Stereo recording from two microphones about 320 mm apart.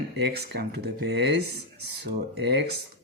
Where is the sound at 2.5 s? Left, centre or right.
Right.